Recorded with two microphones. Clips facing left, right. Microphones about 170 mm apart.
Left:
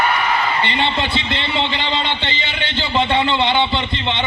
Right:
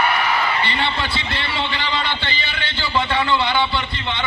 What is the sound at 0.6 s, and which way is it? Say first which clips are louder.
A man's voice: left 3 dB; 20° left (ahead or behind).